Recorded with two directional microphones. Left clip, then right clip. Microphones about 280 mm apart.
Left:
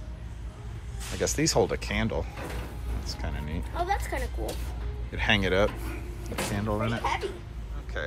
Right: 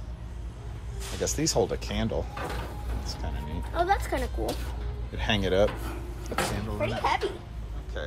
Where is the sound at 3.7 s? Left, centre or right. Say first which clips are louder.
Right 4 dB; right.